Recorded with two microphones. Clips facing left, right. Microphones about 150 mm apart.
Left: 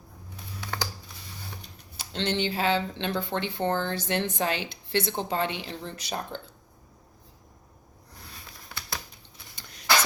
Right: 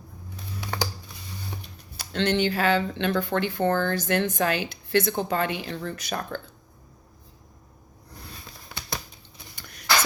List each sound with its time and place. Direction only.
0.6 s computer keyboard: 15° right (ahead or behind)
2.0 s speech: 25° left (ahead or behind)